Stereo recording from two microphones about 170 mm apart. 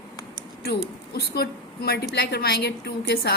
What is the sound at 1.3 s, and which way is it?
A woman's voice, 70° left (ahead or behind).